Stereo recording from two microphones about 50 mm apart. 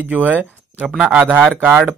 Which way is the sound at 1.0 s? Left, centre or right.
Centre.